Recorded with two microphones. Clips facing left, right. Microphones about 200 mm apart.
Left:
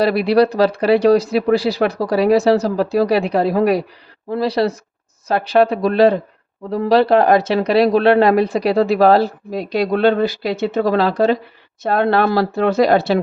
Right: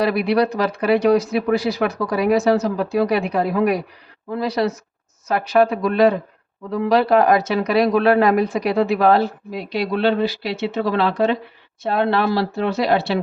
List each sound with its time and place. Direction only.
0.0 s speech: 35° left (ahead or behind)
11.8 s speech: 50° left (ahead or behind)